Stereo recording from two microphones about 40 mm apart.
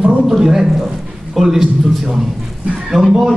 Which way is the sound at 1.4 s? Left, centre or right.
Centre.